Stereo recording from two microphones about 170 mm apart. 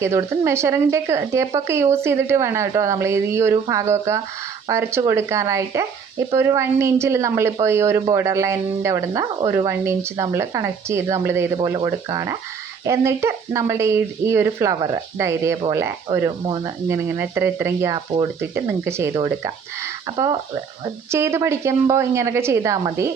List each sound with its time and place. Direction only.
0.0 s speech: 15° right (ahead or behind)
17.1 s speech: 15° right (ahead or behind)